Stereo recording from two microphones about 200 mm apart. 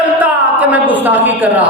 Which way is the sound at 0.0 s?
10° right (ahead or behind).